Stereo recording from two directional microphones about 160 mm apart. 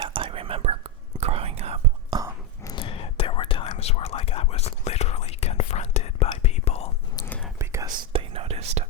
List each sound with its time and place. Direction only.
0.0 s whispering: 35° right (ahead or behind)
2.0 s a sound: 25° right (ahead or behind)
2.7 s whispering: 35° left (ahead or behind)
7.3 s whispering: 5° left (ahead or behind)
7.6 s whispering: 20° right (ahead or behind)
8.1 s whispering: 35° right (ahead or behind)